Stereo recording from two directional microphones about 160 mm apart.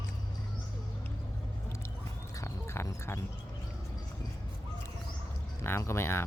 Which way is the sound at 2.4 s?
15° left (ahead or behind).